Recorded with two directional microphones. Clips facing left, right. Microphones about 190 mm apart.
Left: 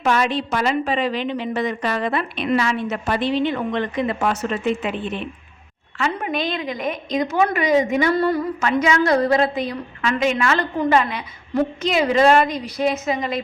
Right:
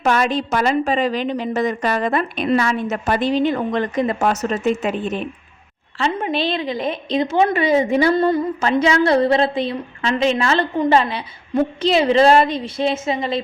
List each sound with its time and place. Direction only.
0.0 s a woman's voice: 45° right (ahead or behind)
6.0 s a woman's voice: 25° right (ahead or behind)